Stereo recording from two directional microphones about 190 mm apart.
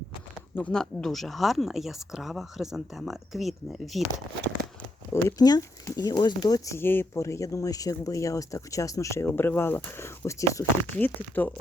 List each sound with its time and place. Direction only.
0.5 s speech: 5° left (ahead or behind)
5.1 s speech: 20° left (ahead or behind)